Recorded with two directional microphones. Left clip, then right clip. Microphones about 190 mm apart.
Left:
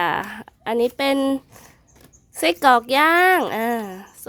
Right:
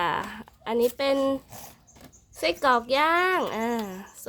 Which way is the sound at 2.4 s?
35° left (ahead or behind).